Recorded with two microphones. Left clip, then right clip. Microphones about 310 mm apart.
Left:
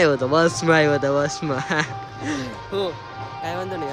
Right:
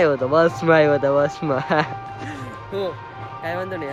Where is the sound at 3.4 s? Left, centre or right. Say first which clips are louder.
Right 1 dB; centre.